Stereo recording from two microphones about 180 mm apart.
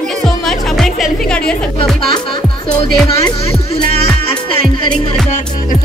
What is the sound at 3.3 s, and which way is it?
Speech, 30° left (ahead or behind).